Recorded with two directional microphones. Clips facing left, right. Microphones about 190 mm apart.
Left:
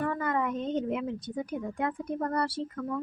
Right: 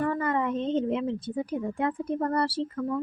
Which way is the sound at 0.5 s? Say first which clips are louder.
Right 4 dB; 25° right (ahead or behind).